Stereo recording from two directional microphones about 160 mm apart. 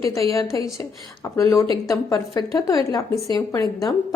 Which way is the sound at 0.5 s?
20° left (ahead or behind).